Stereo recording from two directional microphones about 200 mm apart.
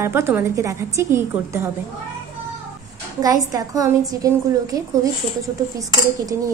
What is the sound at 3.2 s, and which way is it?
A woman's voice, 20° right (ahead or behind).